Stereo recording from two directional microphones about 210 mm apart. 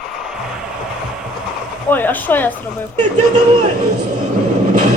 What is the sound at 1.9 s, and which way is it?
Speech, 10° left (ahead or behind).